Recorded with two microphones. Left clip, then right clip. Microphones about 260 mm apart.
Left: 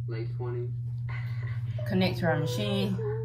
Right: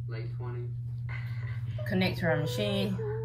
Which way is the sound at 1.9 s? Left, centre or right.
Centre.